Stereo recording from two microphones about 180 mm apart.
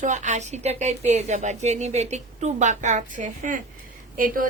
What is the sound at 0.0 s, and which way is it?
A woman's voice, 40° right (ahead or behind).